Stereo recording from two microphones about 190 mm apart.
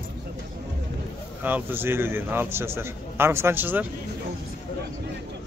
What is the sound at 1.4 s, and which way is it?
A man's voice, 10° right (ahead or behind).